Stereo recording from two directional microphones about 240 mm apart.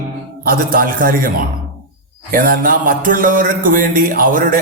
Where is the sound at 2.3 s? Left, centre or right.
Right.